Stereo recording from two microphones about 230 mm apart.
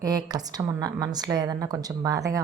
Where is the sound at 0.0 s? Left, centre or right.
Centre.